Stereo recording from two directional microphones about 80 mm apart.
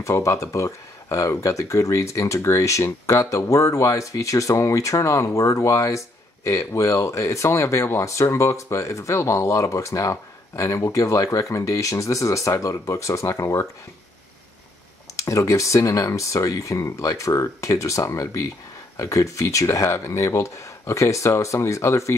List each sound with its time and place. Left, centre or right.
0.0 s speech: left
15.1 s speech: left